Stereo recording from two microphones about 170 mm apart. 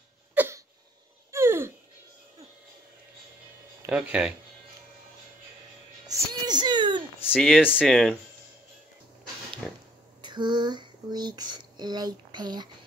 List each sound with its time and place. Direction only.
0.3 s cough: 10° right (ahead or behind)
1.3 s a sound: 15° right (ahead or behind)
3.8 s speech: 10° right (ahead or behind)
6.0 s music: 25° right (ahead or behind)
7.3 s speech: 5° left (ahead or behind)
10.2 s a sound: 25° right (ahead or behind)